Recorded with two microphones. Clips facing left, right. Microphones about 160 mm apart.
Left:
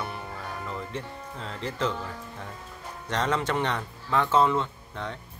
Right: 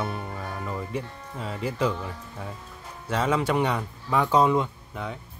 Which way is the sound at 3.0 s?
5° right (ahead or behind).